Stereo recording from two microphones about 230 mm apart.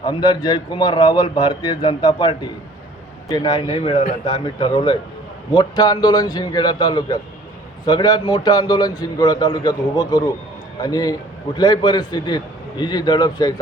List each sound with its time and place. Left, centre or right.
0.0 s a man's voice: centre